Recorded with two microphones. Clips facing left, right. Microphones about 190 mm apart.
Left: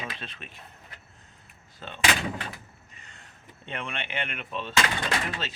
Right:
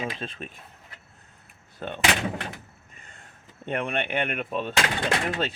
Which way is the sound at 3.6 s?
55° right (ahead or behind).